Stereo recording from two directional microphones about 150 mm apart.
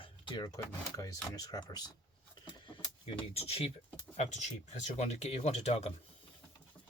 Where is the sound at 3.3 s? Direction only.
40° left (ahead or behind).